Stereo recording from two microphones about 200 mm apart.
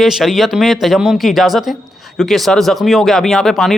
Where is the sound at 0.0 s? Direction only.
Centre (ahead or behind).